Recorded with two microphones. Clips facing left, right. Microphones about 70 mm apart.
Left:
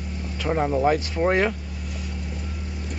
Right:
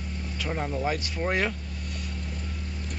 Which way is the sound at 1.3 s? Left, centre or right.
Centre.